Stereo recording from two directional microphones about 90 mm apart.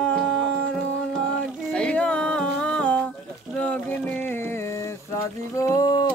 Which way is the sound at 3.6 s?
20° left (ahead or behind).